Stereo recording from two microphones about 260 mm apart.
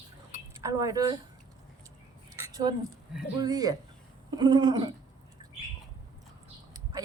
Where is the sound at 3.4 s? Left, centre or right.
Centre.